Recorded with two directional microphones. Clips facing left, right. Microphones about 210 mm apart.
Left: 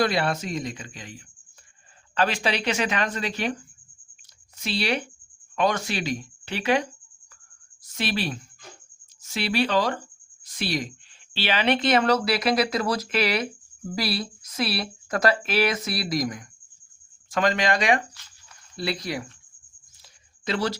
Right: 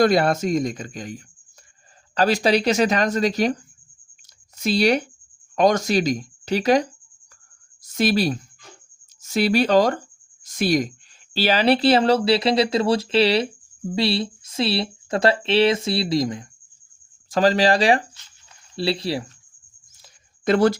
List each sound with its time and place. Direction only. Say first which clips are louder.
0.0 s speech: right 7 dB; 45° right (ahead or behind)
4.6 s speech: right 8 dB; 40° right (ahead or behind)
7.9 s speech: right 8 dB; 40° right (ahead or behind)
20.4 s speech: right 9 dB; 50° right (ahead or behind)